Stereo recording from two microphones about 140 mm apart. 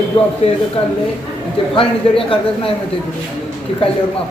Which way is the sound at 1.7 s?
40° left (ahead or behind).